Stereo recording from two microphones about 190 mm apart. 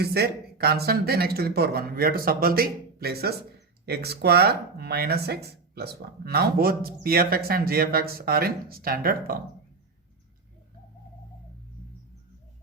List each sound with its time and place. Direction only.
0.0 s speech: 55° right (ahead or behind)